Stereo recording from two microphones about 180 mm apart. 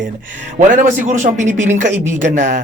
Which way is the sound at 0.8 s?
45° right (ahead or behind).